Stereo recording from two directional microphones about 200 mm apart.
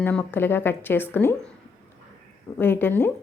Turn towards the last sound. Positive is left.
turn(degrees=10)  # may be behind; listen again after turning